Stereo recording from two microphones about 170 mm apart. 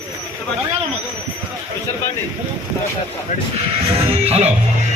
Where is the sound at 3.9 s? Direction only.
35° right (ahead or behind).